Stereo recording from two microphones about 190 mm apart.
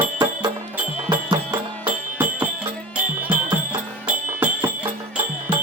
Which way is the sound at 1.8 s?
10° right (ahead or behind).